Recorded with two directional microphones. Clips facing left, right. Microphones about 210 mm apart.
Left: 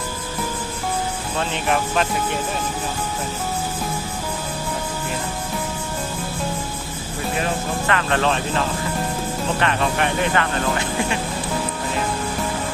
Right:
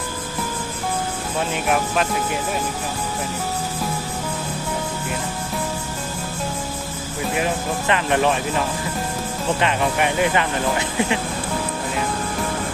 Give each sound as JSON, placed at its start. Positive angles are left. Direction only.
{"t": 1.4, "sound": "speech", "side_deg": -5}
{"t": 7.3, "sound": "speech", "side_deg": -15}